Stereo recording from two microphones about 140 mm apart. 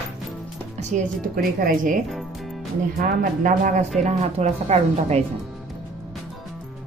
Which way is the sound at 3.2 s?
65° right (ahead or behind).